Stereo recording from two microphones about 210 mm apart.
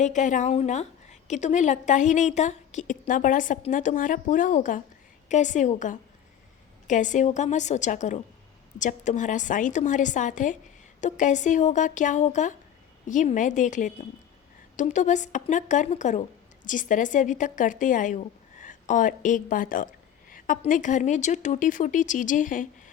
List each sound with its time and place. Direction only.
0.0 s a woman's voice: 35° left (ahead or behind)